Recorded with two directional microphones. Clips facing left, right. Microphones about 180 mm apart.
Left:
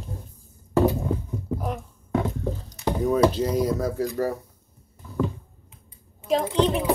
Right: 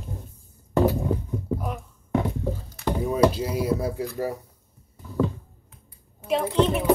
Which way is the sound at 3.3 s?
10° right (ahead or behind).